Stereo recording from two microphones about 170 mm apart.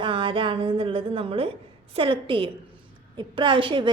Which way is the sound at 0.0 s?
30° right (ahead or behind).